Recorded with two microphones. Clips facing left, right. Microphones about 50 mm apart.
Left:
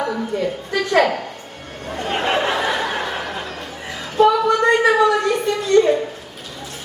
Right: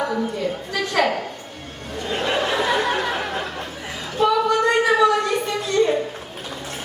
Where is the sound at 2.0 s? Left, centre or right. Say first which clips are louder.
Left 2 dB; left.